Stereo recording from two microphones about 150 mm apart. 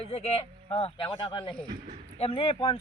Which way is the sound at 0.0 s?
45° left (ahead or behind).